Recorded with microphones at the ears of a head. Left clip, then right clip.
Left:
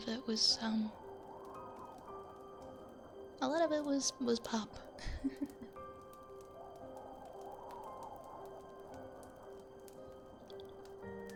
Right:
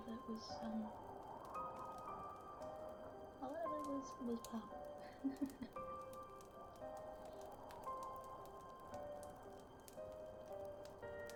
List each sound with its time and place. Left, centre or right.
0.0 s a woman's voice: left
3.4 s a woman's voice: left